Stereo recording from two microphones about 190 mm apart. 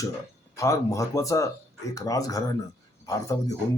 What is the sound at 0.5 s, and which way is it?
Speech, 15° left (ahead or behind).